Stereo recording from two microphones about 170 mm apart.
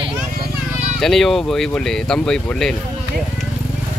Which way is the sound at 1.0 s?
Centre (ahead or behind).